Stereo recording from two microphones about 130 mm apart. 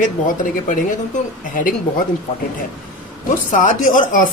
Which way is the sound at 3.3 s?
85° left.